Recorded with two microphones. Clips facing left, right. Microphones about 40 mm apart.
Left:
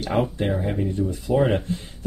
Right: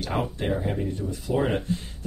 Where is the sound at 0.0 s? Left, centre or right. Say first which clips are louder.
Left 5 dB; centre.